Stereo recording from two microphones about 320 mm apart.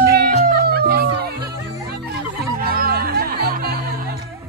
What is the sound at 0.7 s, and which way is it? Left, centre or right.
Music, right.